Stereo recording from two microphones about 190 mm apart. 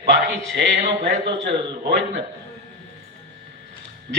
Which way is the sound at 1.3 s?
65° right (ahead or behind).